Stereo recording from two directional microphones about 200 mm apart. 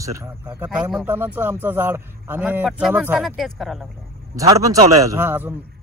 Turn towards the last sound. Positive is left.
turn(degrees=-10)  # may be behind; listen again after turning